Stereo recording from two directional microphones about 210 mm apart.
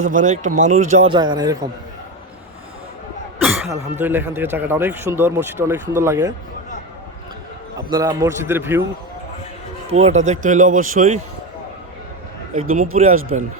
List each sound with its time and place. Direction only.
0.0 s a man's voice: 35° right (ahead or behind)
1.1 s a man's voice: 20° right (ahead or behind)
3.4 s cough: centre (ahead or behind)
4.0 s speech: 10° right (ahead or behind)
7.9 s speech: 15° right (ahead or behind)
9.9 s a man's voice: 30° right (ahead or behind)
12.6 s a man's voice: 35° right (ahead or behind)